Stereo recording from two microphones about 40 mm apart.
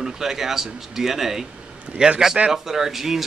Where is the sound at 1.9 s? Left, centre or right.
Right.